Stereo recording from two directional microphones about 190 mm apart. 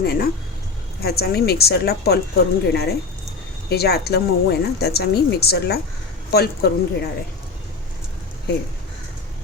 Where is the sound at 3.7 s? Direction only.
55° left (ahead or behind).